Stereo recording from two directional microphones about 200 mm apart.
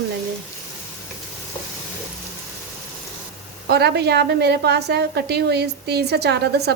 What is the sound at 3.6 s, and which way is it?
A woman's voice, 55° right (ahead or behind).